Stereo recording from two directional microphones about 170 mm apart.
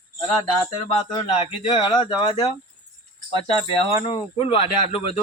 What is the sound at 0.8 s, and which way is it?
Speech, 35° left (ahead or behind).